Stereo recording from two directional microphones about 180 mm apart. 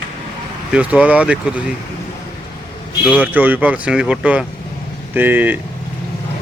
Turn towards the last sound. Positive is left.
turn(degrees=-10)  # may be behind; listen again after turning